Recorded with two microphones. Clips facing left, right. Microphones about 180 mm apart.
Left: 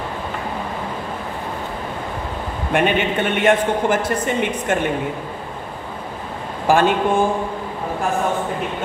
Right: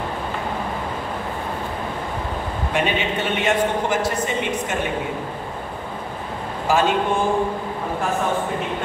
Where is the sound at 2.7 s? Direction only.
55° left (ahead or behind).